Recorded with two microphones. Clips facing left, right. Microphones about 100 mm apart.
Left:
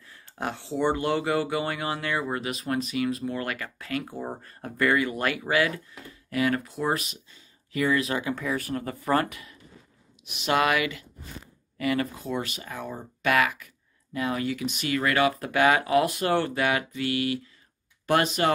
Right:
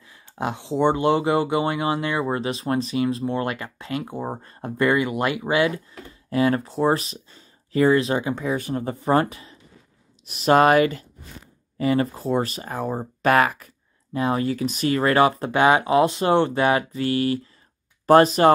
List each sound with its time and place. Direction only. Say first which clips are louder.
0.1 s speech: right 5 dB; 15° right (ahead or behind)
10.2 s speech: right 8 dB; 40° right (ahead or behind)